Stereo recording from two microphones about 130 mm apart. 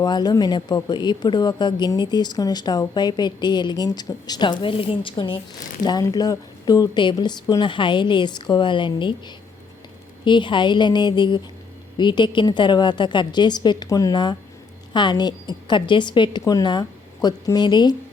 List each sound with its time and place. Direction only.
0.0 s speech: 30° left (ahead or behind)
5.8 s speech: 30° left (ahead or behind)